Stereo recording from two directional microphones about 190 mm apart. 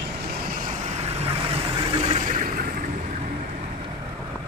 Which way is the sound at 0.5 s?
40° right (ahead or behind).